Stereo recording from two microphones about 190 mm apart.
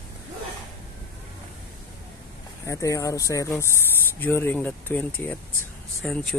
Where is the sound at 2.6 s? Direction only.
15° left (ahead or behind).